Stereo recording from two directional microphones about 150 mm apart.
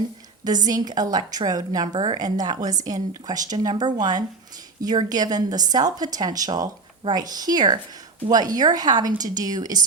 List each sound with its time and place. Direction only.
0.4 s a woman's voice: 25° right (ahead or behind)